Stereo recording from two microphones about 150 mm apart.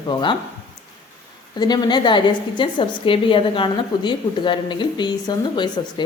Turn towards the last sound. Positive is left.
turn(degrees=30)  # may be behind; listen again after turning